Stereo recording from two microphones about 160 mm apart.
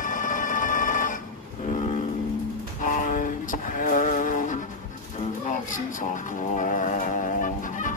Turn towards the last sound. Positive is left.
turn(degrees=55)  # may be behind; listen again after turning